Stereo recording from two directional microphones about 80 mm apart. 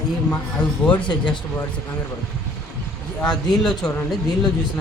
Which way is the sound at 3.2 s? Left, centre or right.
Centre.